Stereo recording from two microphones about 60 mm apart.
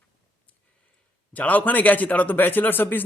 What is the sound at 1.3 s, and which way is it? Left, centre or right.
A man's voice, left.